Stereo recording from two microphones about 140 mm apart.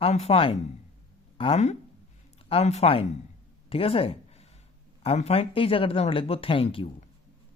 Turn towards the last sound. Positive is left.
turn(degrees=40)  # may be behind; listen again after turning